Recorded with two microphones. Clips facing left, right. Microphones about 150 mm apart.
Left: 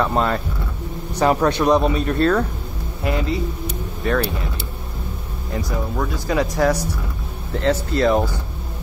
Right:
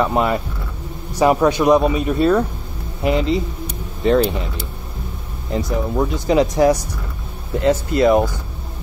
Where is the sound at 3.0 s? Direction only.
20° right (ahead or behind).